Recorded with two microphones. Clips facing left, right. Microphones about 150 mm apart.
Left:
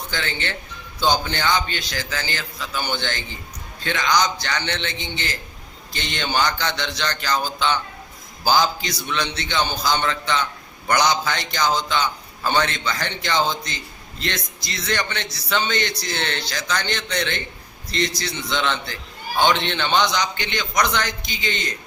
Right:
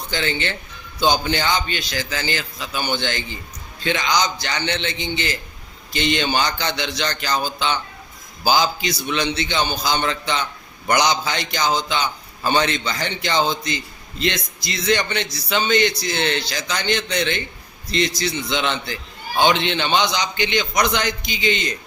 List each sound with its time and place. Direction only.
0.1 s a man's voice: 15° right (ahead or behind)